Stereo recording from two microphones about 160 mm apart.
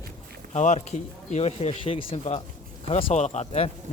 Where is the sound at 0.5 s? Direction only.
50° left (ahead or behind).